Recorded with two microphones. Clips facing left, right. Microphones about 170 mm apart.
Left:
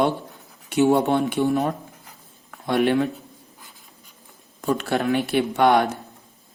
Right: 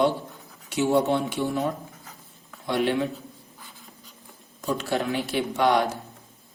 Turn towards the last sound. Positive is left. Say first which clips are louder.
# left 4 dB
turn(degrees=60)  # may be behind; listen again after turning